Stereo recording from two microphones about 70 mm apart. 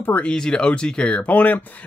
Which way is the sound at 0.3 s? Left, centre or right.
Centre.